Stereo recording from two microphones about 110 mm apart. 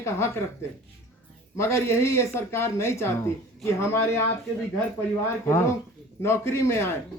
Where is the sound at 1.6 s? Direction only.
25° left (ahead or behind).